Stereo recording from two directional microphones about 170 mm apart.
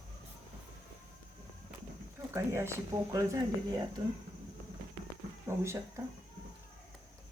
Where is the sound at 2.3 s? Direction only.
15° right (ahead or behind).